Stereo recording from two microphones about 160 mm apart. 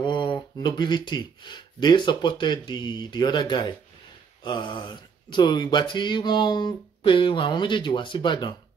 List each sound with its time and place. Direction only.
0.0 s speech: 30° left (ahead or behind)